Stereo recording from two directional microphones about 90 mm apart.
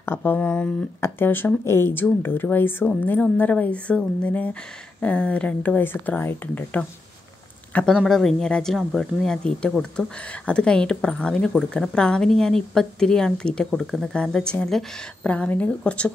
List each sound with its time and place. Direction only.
0.0 s speech: 25° left (ahead or behind)
7.9 s speech: 5° left (ahead or behind)